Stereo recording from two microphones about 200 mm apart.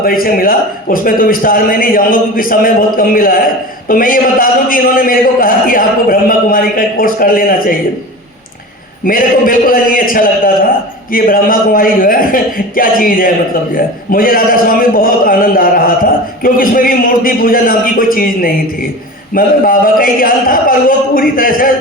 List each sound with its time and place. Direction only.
0.0 s a man's voice: 45° left (ahead or behind)
9.0 s a man's voice: 45° left (ahead or behind)